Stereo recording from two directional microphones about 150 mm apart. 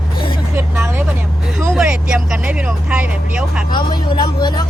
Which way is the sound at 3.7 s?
30° left (ahead or behind).